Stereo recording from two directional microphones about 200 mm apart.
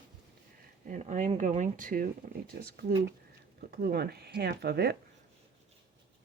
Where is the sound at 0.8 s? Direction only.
40° right (ahead or behind); by 4.9 s 55° right (ahead or behind).